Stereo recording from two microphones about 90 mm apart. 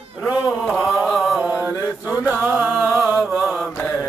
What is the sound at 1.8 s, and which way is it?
Chant, 40° left (ahead or behind).